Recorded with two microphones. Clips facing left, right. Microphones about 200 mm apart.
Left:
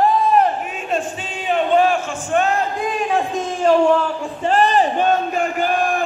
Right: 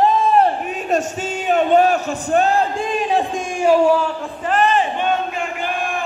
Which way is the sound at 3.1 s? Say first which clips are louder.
Even; 15° right (ahead or behind).